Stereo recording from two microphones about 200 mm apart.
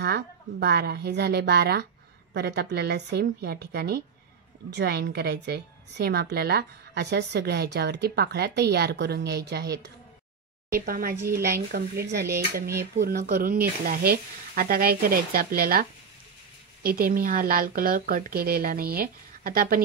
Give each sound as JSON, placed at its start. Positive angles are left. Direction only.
{"t": 0.0, "sound": "a woman's voice", "side_deg": -55}
{"t": 10.9, "sound": "speech", "side_deg": -45}
{"t": 11.1, "sound": "a woman's voice", "side_deg": -15}
{"t": 11.7, "sound": "speech", "side_deg": -55}